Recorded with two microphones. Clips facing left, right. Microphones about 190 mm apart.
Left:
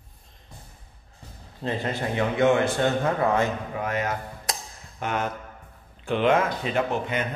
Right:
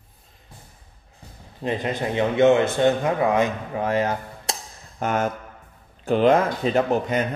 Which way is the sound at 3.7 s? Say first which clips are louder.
Right 5 dB; 30° right (ahead or behind).